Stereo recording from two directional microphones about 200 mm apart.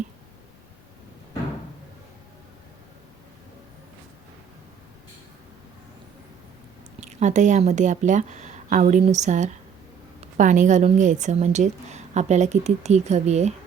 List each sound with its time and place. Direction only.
7.0 s a woman's voice: 35° right (ahead or behind)